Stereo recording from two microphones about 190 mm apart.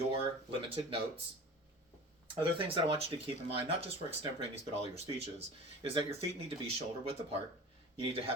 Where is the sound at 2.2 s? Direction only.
25° right (ahead or behind).